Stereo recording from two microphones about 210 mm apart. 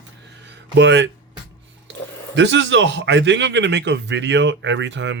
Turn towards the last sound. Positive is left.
turn(degrees=-60)  # may be behind; listen again after turning